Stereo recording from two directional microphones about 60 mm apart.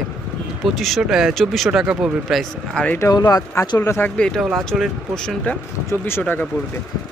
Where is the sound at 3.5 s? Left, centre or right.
Left.